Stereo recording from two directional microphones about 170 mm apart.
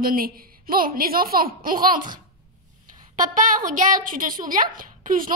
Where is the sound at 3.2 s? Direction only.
50° right (ahead or behind).